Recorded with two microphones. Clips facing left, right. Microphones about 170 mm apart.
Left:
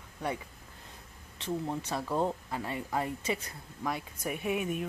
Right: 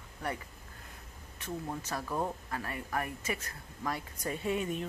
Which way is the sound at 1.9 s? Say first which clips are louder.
Left 4 dB; 25° left (ahead or behind).